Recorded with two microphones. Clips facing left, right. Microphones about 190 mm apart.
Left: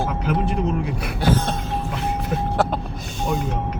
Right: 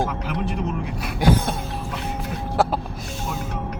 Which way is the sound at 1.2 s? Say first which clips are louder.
Right 1 dB; 10° right (ahead or behind).